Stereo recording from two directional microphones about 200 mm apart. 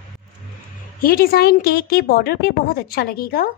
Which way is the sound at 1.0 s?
50° left (ahead or behind).